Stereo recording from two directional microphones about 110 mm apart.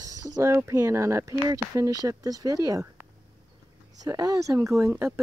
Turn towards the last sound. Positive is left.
turn(degrees=-25)  # may be behind; listen again after turning